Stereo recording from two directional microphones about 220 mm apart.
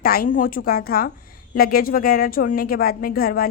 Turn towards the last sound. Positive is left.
turn(degrees=45)  # may be behind; listen again after turning